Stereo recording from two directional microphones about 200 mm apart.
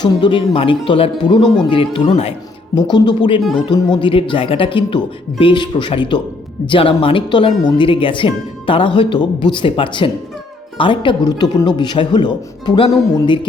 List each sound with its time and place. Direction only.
0.0 s speech: 25° left (ahead or behind)